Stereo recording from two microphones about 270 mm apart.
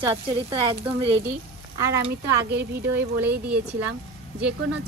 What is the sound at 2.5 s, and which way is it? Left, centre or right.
Speech, right.